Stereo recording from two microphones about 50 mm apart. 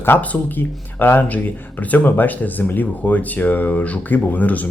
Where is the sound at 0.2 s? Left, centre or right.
Left.